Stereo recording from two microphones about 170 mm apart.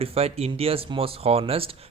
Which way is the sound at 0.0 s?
35° right (ahead or behind).